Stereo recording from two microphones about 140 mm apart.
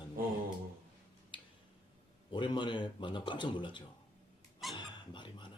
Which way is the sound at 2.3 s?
35° left (ahead or behind).